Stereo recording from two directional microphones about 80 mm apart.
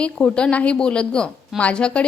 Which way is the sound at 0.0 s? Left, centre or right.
Centre.